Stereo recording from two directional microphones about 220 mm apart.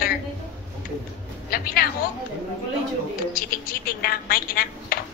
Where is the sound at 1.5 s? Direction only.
40° left (ahead or behind).